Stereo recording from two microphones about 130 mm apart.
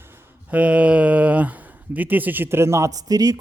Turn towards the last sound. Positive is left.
turn(degrees=-30)  # may be behind; listen again after turning